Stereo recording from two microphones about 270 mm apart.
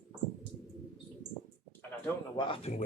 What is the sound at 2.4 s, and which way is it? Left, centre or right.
Speech, centre.